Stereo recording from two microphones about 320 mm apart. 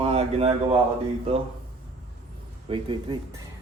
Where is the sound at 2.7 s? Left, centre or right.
Centre.